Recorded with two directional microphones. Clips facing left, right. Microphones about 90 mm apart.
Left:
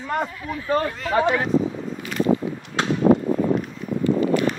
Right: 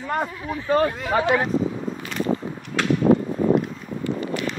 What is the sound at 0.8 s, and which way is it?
Speech, 15° right (ahead or behind).